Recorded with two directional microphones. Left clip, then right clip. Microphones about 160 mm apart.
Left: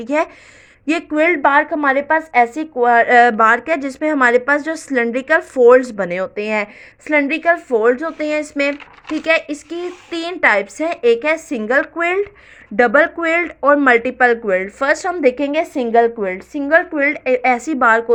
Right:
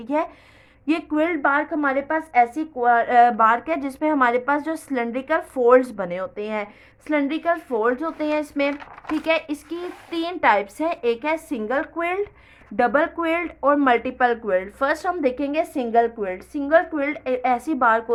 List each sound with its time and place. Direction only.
0.0 s a woman's voice: 30° left (ahead or behind)